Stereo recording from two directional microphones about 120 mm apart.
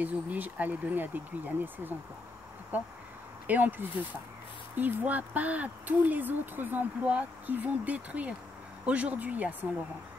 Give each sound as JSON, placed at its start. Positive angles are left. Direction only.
{"t": 0.0, "sound": "speech", "side_deg": -15}